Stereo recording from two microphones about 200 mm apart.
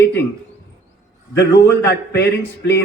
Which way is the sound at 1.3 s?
55° left (ahead or behind).